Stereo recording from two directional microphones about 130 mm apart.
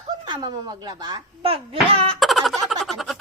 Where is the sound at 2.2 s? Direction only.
Centre (ahead or behind).